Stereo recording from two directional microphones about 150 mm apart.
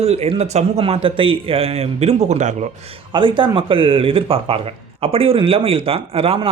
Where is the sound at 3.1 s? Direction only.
35° right (ahead or behind).